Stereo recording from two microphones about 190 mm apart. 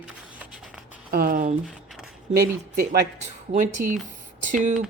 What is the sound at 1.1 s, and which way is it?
Speech, 50° right (ahead or behind).